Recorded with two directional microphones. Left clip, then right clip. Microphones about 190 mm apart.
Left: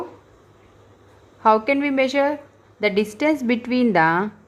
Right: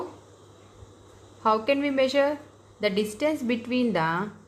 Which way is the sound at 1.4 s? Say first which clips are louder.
Left 6 dB; 30° left (ahead or behind).